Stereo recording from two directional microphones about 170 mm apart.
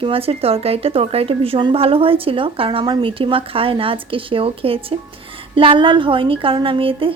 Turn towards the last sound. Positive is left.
turn(degrees=-30)  # may be behind; listen again after turning